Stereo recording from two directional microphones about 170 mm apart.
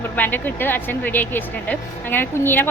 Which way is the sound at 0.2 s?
10° left (ahead or behind).